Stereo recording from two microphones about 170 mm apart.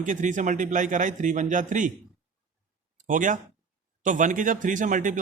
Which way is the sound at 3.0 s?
50° right (ahead or behind).